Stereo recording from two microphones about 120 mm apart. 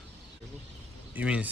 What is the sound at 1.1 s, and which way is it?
Speech, 10° right (ahead or behind).